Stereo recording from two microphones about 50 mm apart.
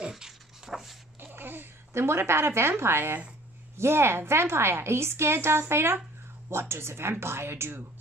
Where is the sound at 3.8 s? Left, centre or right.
Right.